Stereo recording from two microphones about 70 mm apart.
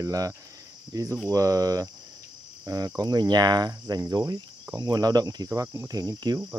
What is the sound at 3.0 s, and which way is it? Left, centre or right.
Speech, right.